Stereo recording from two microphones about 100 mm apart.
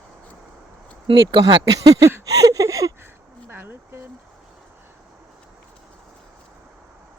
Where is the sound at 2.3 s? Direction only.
35° right (ahead or behind).